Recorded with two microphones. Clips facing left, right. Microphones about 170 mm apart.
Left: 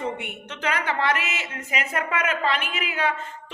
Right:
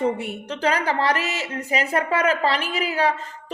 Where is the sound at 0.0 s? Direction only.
35° right (ahead or behind).